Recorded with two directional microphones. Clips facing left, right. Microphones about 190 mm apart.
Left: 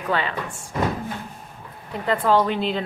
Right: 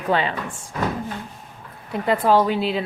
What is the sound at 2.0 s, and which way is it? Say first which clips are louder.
Speech: right 2 dB; 10° right (ahead or behind).